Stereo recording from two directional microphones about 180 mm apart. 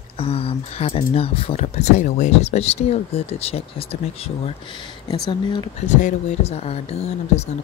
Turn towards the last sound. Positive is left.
turn(degrees=35)  # may be behind; listen again after turning